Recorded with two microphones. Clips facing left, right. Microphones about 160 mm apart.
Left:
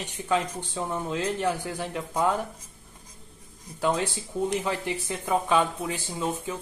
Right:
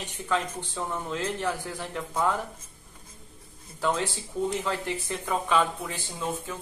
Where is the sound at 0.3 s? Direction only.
15° left (ahead or behind).